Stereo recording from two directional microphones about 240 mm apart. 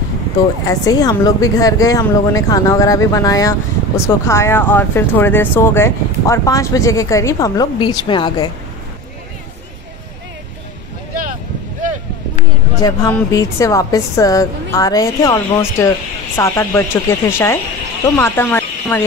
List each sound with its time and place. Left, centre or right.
0.7 s a woman's voice: centre
12.8 s a woman's voice: centre